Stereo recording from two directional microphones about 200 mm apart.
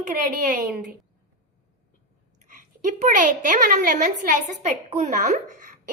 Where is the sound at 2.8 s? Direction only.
40° right (ahead or behind).